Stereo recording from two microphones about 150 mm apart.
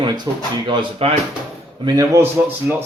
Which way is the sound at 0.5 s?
30° right (ahead or behind).